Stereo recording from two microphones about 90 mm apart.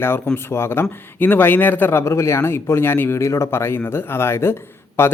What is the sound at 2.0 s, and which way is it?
Speech, 30° left (ahead or behind).